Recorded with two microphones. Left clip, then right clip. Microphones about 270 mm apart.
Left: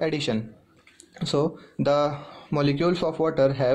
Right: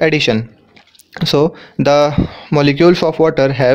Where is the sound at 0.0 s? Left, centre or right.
Right.